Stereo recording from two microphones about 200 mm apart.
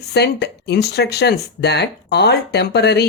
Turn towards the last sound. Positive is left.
turn(degrees=55)  # may be behind; listen again after turning